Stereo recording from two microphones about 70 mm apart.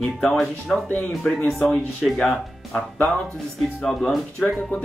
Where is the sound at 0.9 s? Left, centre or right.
Left; by 4.2 s centre.